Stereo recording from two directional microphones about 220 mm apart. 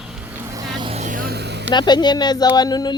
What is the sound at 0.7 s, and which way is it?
Vehicle, 25° right (ahead or behind).